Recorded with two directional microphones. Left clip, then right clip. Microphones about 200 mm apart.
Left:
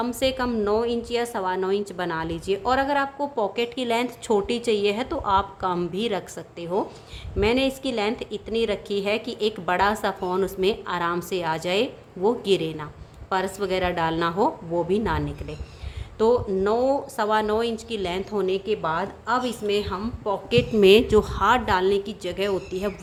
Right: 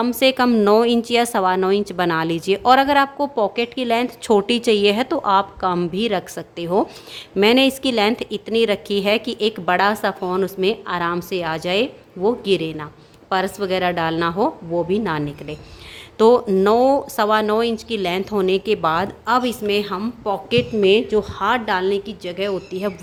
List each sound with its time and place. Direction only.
0.0 s a woman's voice: 30° right (ahead or behind)
16.1 s speech: 35° right (ahead or behind)
20.7 s a woman's voice: 10° left (ahead or behind)
21.3 s a woman's voice: 5° right (ahead or behind)